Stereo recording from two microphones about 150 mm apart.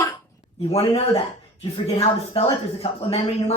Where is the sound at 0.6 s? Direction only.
40° left (ahead or behind).